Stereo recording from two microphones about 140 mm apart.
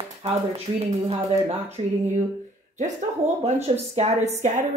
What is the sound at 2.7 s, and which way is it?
Speech, 55° right (ahead or behind).